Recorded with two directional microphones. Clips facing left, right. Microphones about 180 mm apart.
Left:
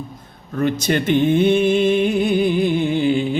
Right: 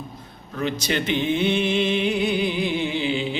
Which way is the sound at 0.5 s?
50° left (ahead or behind).